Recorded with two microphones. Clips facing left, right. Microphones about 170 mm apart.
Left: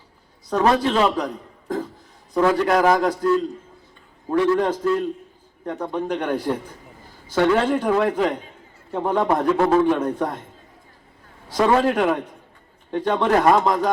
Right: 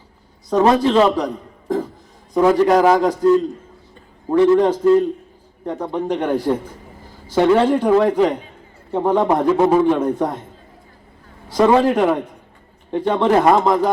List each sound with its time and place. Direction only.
0.6 s a man's voice: 30° right (ahead or behind)
9.5 s a man's voice: 15° right (ahead or behind)
10.2 s speech: 30° right (ahead or behind)
11.4 s speech: 25° right (ahead or behind)